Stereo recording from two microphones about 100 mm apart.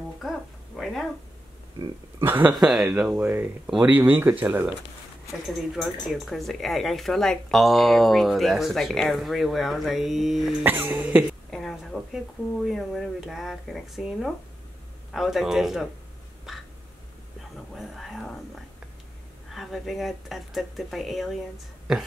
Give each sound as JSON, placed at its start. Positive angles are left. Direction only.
{"t": 0.2, "sound": "a sound", "side_deg": 0}
{"t": 2.2, "sound": "music", "side_deg": -20}
{"t": 2.5, "sound": "speech", "side_deg": -5}
{"t": 5.5, "sound": "speech", "side_deg": 0}
{"t": 10.6, "sound": "music", "side_deg": -20}
{"t": 11.5, "sound": "speech", "side_deg": 0}
{"t": 16.5, "sound": "a sound", "side_deg": -5}
{"t": 17.7, "sound": "speech", "side_deg": 0}